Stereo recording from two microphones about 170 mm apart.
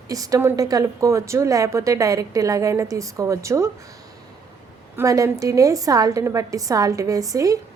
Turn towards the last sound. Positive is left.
turn(degrees=-20)  # may be behind; listen again after turning